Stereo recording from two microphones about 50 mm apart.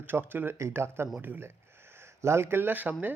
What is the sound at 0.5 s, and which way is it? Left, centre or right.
Speech, right.